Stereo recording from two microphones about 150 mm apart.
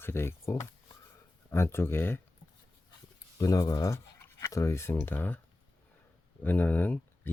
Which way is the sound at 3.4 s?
25° left (ahead or behind).